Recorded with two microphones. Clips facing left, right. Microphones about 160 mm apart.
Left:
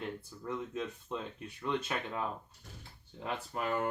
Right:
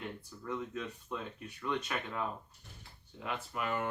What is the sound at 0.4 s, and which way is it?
Speech, 25° left (ahead or behind).